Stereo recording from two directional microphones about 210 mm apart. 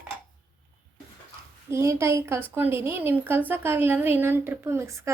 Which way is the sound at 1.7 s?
15° right (ahead or behind).